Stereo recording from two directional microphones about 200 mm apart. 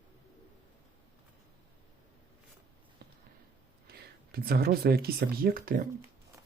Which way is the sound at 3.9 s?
50° right (ahead or behind).